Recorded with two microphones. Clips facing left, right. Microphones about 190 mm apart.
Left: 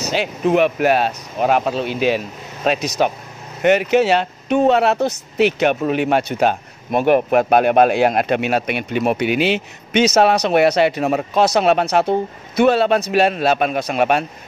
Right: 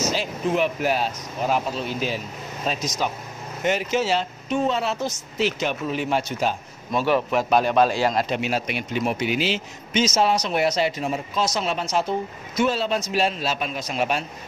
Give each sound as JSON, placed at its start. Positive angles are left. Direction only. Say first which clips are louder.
{"t": 0.0, "sound": "speech", "louder": "left 5 dB", "side_deg": 65}